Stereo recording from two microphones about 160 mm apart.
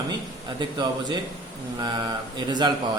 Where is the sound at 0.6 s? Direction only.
30° right (ahead or behind).